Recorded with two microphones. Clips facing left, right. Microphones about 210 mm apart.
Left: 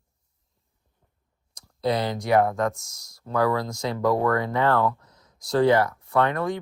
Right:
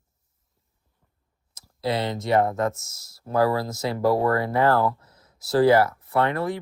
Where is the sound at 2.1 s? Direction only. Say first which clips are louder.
Even; centre (ahead or behind).